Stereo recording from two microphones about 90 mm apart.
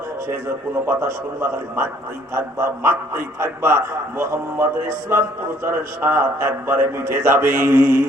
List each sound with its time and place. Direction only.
0.9 s a man's voice: 25° right (ahead or behind)